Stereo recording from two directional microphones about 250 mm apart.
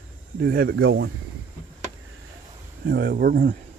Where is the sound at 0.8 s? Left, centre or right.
Right.